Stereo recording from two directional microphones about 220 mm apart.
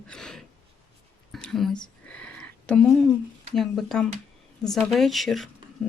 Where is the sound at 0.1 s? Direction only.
5° left (ahead or behind).